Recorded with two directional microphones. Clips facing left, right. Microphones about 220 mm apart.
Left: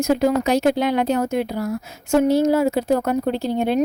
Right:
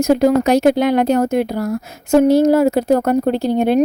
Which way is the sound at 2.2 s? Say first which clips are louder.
Right 5 dB; 70° right (ahead or behind).